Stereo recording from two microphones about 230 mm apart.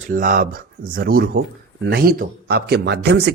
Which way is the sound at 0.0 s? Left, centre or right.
Right.